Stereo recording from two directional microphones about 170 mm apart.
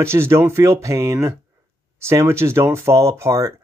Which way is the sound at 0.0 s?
15° right (ahead or behind).